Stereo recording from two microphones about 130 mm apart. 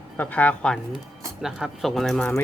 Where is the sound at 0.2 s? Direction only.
10° left (ahead or behind).